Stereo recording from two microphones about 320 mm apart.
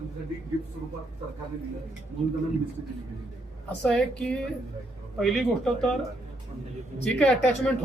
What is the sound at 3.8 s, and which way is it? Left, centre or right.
A man's voice, centre.